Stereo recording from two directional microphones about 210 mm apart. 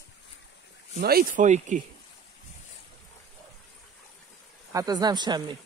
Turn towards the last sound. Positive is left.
turn(degrees=-20)  # may be behind; listen again after turning